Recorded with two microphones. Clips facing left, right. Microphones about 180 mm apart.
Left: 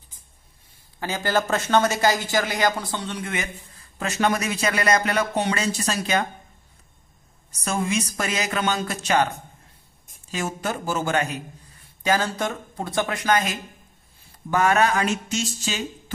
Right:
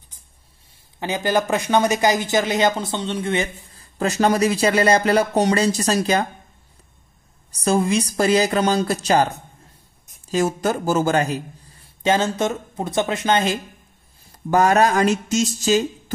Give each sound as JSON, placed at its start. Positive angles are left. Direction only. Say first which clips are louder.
{"t": 0.9, "sound": "speech", "louder": "right 3 dB", "side_deg": -20}
{"t": 7.6, "sound": "speech", "louder": "right 6 dB", "side_deg": -35}
{"t": 10.3, "sound": "speech", "louder": "right 8 dB", "side_deg": -40}
{"t": 12.0, "sound": "speech", "louder": "right 4 dB", "side_deg": -25}
{"t": 14.5, "sound": "speech", "louder": "right 4 dB", "side_deg": -40}